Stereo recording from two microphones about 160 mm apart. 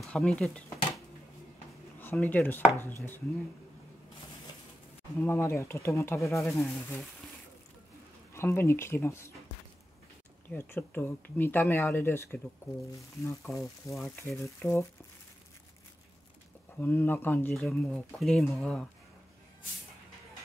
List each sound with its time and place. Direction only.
0.0 s speech: 5° left (ahead or behind)
5.2 s speech: 15° left (ahead or behind)
8.3 s speech: 15° left (ahead or behind)
10.5 s speech: 10° left (ahead or behind)
16.7 s speech: 10° left (ahead or behind)